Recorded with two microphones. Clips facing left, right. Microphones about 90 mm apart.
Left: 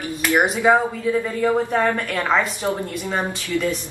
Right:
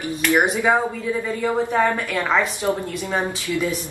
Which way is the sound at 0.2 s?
15° left (ahead or behind).